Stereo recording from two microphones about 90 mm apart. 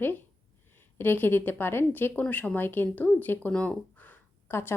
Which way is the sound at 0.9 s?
25° left (ahead or behind).